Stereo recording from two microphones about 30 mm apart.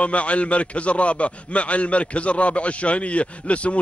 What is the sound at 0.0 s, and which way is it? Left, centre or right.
A man's voice, left.